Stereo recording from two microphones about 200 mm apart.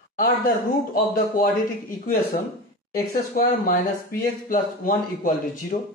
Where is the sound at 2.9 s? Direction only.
45° left (ahead or behind).